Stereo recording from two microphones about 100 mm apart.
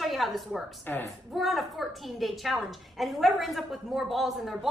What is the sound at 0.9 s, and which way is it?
Speech, 15° left (ahead or behind).